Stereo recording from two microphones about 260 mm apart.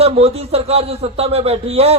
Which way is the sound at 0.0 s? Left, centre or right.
Right.